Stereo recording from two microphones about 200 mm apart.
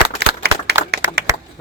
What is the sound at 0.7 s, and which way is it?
Clapping, 55° right (ahead or behind).